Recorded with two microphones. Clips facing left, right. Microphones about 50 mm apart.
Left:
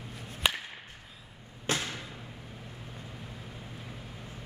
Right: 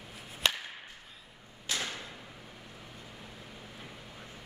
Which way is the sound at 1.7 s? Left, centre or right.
Left.